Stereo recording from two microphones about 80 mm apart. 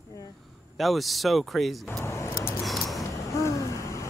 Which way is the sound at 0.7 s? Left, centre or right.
Centre.